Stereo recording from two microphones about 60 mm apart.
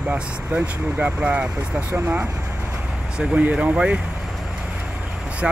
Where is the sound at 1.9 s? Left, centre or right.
Right.